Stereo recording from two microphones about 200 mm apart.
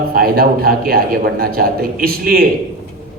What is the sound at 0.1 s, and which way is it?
A man's voice, 50° right (ahead or behind).